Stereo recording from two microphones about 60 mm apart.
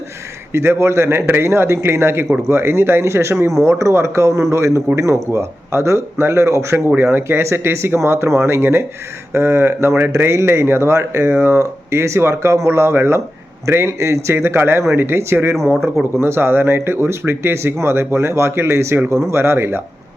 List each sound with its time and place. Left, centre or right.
0.5 s speech: right